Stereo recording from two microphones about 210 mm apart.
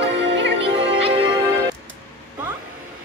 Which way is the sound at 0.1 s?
60° right (ahead or behind).